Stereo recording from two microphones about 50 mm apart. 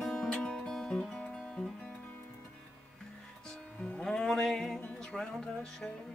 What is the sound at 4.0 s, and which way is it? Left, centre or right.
Music, centre.